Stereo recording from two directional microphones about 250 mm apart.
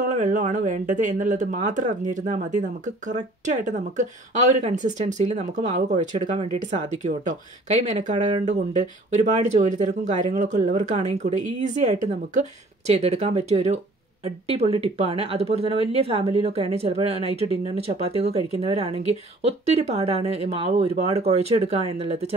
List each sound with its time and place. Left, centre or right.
0.1 s speech: right